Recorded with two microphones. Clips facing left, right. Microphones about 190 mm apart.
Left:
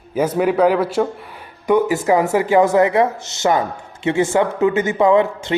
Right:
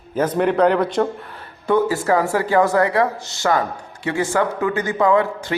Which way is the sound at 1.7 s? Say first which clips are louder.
Left 2 dB; 15° left (ahead or behind).